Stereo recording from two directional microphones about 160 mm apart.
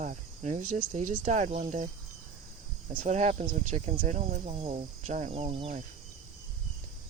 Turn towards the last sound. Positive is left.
turn(degrees=-40)  # may be behind; listen again after turning